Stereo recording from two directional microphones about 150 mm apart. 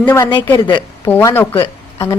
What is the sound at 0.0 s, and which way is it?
A woman's voice, 15° left (ahead or behind).